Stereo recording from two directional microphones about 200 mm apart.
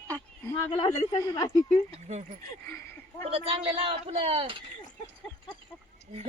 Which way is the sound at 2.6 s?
10° left (ahead or behind).